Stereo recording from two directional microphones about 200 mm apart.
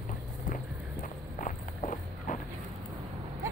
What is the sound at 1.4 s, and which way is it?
Walk, 40° left (ahead or behind).